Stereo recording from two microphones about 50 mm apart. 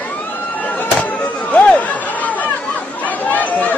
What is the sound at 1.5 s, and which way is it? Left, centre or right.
Chatter, left.